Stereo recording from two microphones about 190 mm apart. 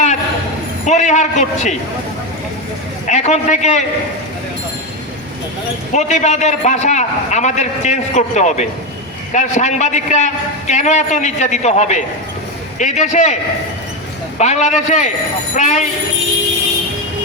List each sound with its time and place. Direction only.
0.9 s a man's voice: 40° left (ahead or behind)
3.1 s a man's voice: 35° left (ahead or behind)
5.9 s a man's voice: 40° left (ahead or behind)
14.3 s a man's voice: 35° left (ahead or behind)